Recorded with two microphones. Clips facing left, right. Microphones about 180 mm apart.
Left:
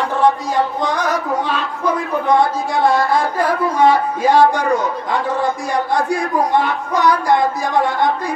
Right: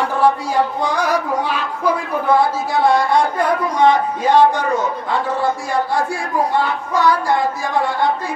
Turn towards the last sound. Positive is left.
turn(degrees=20)  # may be behind; listen again after turning